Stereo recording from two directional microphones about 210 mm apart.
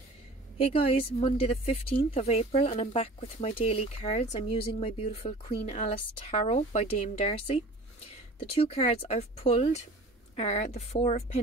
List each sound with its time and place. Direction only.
0.6 s speech: 25° left (ahead or behind)